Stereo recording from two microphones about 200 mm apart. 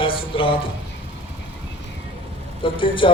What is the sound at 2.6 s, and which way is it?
Speech, 25° left (ahead or behind).